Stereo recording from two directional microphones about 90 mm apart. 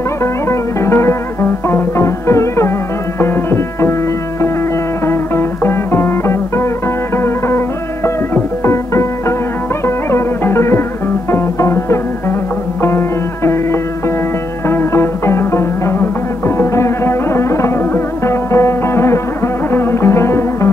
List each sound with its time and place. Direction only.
0.2 s music: 30° left (ahead or behind)
5.0 s music: 30° left (ahead or behind)
9.8 s music: 30° left (ahead or behind)